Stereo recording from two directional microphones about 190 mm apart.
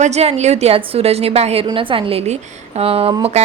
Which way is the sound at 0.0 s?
35° right (ahead or behind).